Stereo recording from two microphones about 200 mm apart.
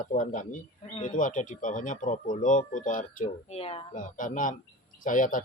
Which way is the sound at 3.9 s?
40° left (ahead or behind).